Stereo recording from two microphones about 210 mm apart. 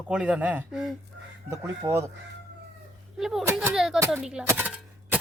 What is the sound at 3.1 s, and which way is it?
Speech, centre (ahead or behind).